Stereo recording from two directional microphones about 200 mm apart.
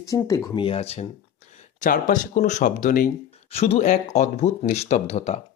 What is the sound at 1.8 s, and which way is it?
Speech, 40° left (ahead or behind).